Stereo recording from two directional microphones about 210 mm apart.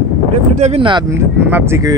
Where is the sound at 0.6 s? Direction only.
30° right (ahead or behind).